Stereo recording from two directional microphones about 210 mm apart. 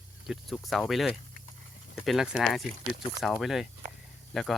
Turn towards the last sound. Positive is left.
turn(degrees=0)  # may be behind; listen again after turning